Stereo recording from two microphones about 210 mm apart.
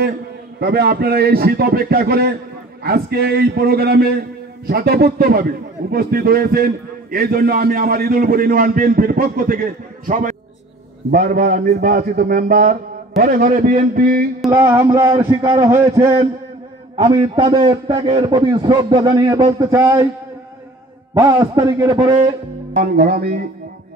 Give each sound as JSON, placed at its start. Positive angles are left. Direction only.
{"t": 0.6, "sound": "a man's voice", "side_deg": -50}
{"t": 14.5, "sound": "a man's voice", "side_deg": -15}
{"t": 21.1, "sound": "a man's voice", "side_deg": -20}
{"t": 22.8, "sound": "a man's voice", "side_deg": -40}